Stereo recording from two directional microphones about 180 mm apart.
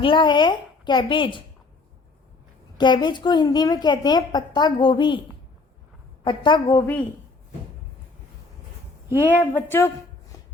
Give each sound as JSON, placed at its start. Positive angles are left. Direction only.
{"t": 0.0, "sound": "a woman's voice", "side_deg": 25}
{"t": 2.7, "sound": "a woman's voice", "side_deg": 25}
{"t": 6.2, "sound": "a woman's voice", "side_deg": 25}
{"t": 9.1, "sound": "a woman's voice", "side_deg": -10}
{"t": 9.5, "sound": "a woman's voice", "side_deg": 10}